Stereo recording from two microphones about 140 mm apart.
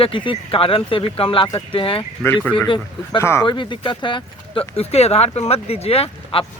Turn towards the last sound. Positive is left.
turn(degrees=45)  # may be behind; listen again after turning